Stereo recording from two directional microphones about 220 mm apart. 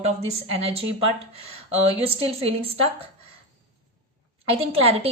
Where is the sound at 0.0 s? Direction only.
30° right (ahead or behind).